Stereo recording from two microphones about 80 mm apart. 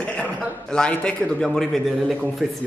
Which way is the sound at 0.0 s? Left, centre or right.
Centre.